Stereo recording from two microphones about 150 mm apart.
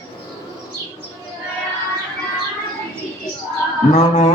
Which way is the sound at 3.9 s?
50° left (ahead or behind).